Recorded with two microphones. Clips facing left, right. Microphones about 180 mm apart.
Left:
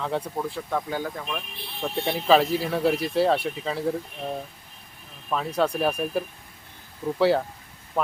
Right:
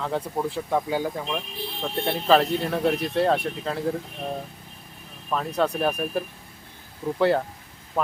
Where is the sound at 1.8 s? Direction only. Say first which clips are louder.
Even; 5° left (ahead or behind).